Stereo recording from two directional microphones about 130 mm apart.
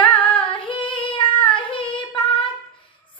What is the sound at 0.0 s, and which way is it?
Female singing, 10° left (ahead or behind).